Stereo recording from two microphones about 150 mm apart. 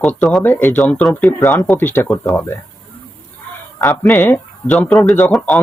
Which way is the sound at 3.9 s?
20° left (ahead or behind).